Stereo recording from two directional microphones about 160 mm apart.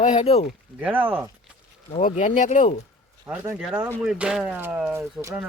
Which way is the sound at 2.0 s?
50° left (ahead or behind).